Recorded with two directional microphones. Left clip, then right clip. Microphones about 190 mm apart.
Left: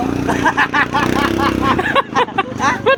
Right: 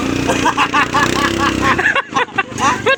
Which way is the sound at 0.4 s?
10° right (ahead or behind).